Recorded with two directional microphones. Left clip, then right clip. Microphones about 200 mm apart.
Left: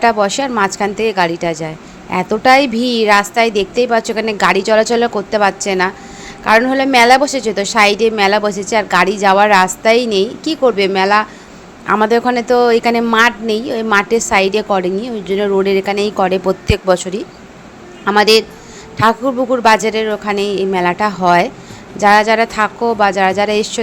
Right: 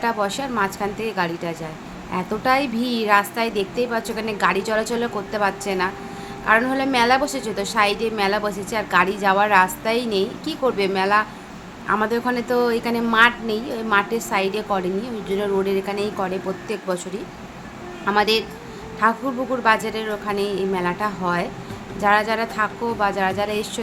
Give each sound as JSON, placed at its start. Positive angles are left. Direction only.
{"t": 0.0, "sound": "a woman's voice", "side_deg": 35}